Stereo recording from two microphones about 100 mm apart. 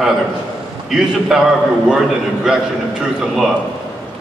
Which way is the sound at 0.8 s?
5° right (ahead or behind).